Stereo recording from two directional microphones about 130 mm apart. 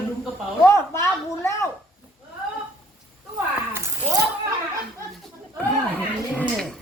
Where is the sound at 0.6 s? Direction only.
20° left (ahead or behind).